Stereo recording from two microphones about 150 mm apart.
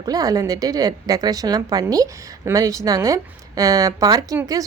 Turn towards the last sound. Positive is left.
turn(degrees=-25)  # may be behind; listen again after turning